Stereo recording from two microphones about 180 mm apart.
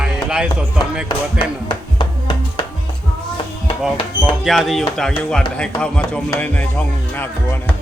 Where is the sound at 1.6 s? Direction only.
25° left (ahead or behind).